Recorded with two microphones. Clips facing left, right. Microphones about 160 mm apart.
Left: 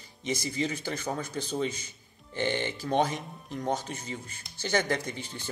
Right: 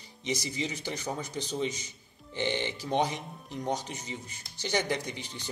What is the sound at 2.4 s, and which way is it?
Speech, 50° left (ahead or behind).